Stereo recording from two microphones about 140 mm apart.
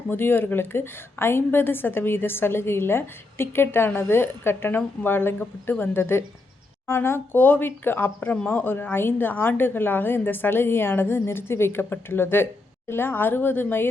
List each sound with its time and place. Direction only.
0.1 s speech: 15° left (ahead or behind)